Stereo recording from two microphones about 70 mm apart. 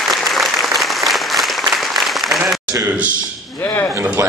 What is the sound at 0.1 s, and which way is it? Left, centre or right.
Applause, centre.